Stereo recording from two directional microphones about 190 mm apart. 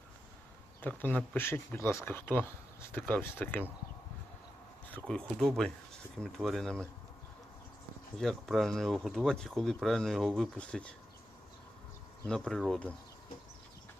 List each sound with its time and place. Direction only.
0.8 s speech: 10° left (ahead or behind)
5.0 s speech: 5° left (ahead or behind)
8.2 s speech: centre (ahead or behind)
12.2 s speech: centre (ahead or behind)